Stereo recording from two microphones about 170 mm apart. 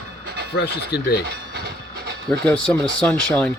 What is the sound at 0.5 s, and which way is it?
Speech, 75° left (ahead or behind).